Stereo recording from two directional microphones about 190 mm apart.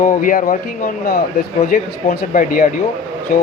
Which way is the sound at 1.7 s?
50° left (ahead or behind).